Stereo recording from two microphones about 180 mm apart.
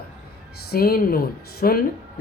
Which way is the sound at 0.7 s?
55° left (ahead or behind).